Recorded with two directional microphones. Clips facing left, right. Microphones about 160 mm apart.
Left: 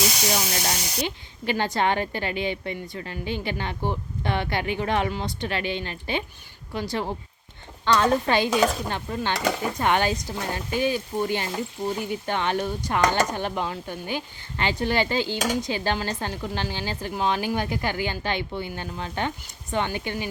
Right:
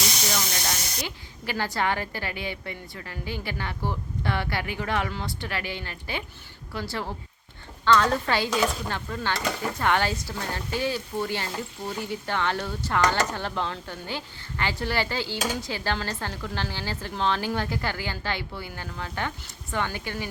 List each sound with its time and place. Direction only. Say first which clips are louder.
0.3 s speech: left 3 dB; 15° left (ahead or behind)